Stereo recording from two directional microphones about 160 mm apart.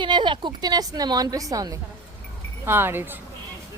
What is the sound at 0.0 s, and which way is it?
A woman's voice, 30° right (ahead or behind).